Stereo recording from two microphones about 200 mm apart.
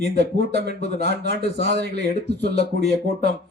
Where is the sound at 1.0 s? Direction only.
55° right (ahead or behind).